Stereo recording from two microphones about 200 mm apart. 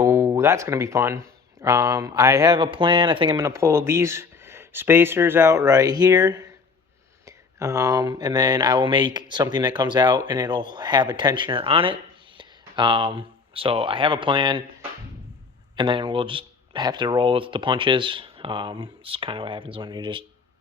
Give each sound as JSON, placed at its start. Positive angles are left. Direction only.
{"t": 0.0, "sound": "speech", "side_deg": -15}